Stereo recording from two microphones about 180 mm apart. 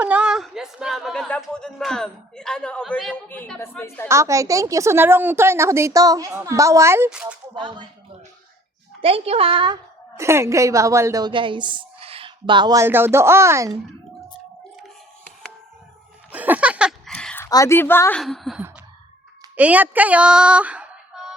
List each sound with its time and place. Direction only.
0.0 s speech: 5° right (ahead or behind); by 4.1 s 10° left (ahead or behind)
4.1 s a woman's voice: 15° right (ahead or behind)
9.0 s a woman's voice: 30° right (ahead or behind)
10.2 s a woman's voice: 15° right (ahead or behind)
16.3 s music: 10° right (ahead or behind)
17.1 s a sound: 5° left (ahead or behind)
17.4 s a woman's voice: 15° left (ahead or behind)
18.2 s a woman's voice: centre (ahead or behind)